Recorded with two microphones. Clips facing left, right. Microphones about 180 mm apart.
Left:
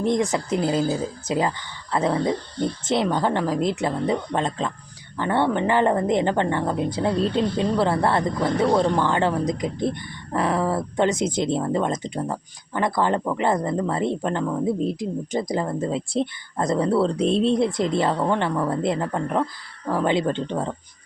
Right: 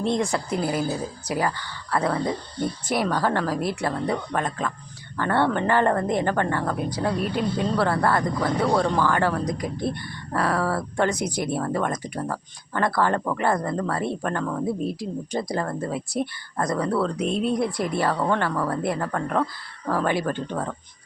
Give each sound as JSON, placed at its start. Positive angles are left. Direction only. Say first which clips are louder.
{"t": 0.0, "sound": "a woman's voice", "louder": "left 2 dB", "side_deg": 15}